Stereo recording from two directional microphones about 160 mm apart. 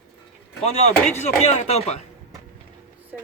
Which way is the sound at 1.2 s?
40° left (ahead or behind).